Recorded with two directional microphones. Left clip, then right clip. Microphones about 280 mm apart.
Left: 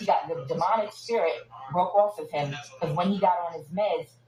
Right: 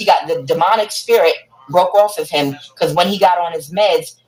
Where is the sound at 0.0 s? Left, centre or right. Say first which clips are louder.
Right 12 dB; right.